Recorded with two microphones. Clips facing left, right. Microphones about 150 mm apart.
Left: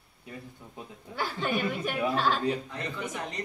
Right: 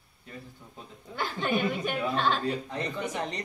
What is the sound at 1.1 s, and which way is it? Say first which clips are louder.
Speech: right 1 dB; 5° left (ahead or behind).